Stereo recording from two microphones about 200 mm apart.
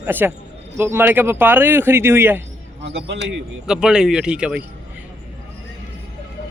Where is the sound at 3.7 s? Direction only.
5° right (ahead or behind).